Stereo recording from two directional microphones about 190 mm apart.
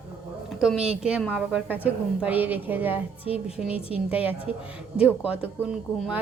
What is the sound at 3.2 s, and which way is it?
Speech, 30° left (ahead or behind).